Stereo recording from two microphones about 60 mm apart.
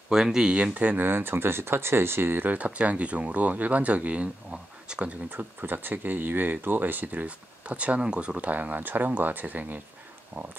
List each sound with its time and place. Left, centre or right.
0.1 s speech: centre
5.3 s speech: right